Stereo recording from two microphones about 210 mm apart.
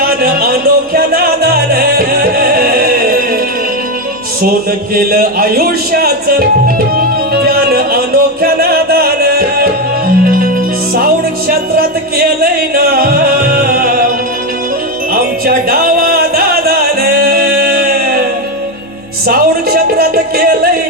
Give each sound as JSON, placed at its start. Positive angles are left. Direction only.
{"t": 0.0, "sound": "music", "side_deg": -45}
{"t": 4.9, "sound": "speech", "side_deg": -45}
{"t": 7.3, "sound": "music", "side_deg": -45}
{"t": 10.9, "sound": "music", "side_deg": -45}
{"t": 15.1, "sound": "music", "side_deg": -45}
{"t": 19.3, "sound": "a sound", "side_deg": -45}